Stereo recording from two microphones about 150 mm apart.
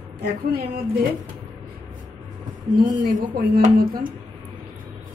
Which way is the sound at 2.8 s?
60° right (ahead or behind).